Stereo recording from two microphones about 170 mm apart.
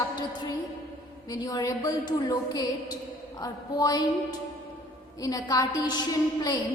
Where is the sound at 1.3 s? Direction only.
20° left (ahead or behind).